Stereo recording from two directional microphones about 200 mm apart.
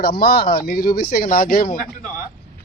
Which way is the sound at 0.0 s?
50° left (ahead or behind).